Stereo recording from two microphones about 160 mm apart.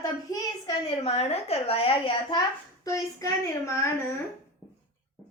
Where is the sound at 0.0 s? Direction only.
20° left (ahead or behind).